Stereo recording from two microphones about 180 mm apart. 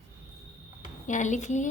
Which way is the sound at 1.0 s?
45° left (ahead or behind).